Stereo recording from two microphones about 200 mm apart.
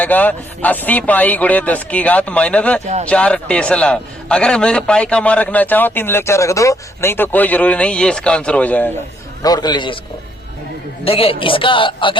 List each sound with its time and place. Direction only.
0.0 s a man's voice: 10° left (ahead or behind)
9.4 s a man's voice: 20° left (ahead or behind)
11.0 s a man's voice: 30° left (ahead or behind)